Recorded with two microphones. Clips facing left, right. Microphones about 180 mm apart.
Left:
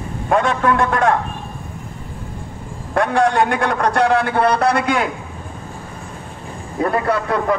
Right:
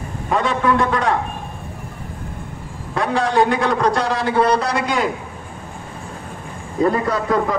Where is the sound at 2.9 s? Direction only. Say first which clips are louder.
Left 4 dB; 55° left (ahead or behind).